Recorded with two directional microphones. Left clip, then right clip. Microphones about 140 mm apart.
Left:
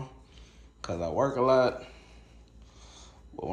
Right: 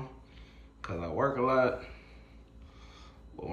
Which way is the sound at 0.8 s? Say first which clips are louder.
Left 3 dB; 20° left (ahead or behind).